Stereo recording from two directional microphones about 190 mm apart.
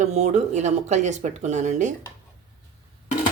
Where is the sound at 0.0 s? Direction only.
35° right (ahead or behind).